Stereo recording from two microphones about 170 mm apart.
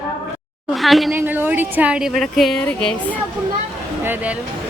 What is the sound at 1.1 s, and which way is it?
A woman's voice, 10° right (ahead or behind).